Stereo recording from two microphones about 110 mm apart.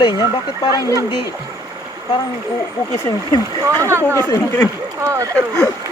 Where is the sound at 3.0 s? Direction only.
30° left (ahead or behind).